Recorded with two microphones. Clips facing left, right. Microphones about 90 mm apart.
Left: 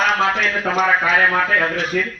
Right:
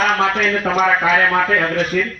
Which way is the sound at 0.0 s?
20° left (ahead or behind).